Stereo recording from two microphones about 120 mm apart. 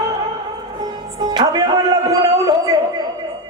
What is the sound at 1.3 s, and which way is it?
A man's voice, 35° right (ahead or behind).